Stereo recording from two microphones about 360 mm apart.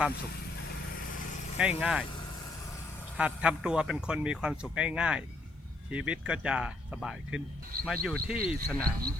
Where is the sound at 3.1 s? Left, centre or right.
Centre.